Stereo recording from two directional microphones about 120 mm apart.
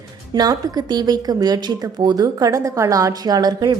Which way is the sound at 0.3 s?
35° right (ahead or behind).